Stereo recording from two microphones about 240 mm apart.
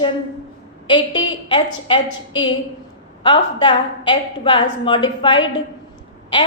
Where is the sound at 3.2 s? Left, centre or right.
Centre.